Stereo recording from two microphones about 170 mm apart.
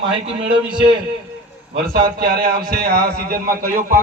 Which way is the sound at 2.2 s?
60° right (ahead or behind).